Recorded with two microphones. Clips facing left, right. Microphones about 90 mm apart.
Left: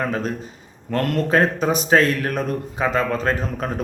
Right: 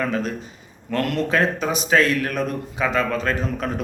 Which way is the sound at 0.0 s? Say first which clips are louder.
Even; 35° left (ahead or behind).